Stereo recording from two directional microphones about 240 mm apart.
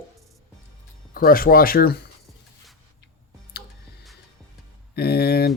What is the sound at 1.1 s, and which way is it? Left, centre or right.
Speech, left.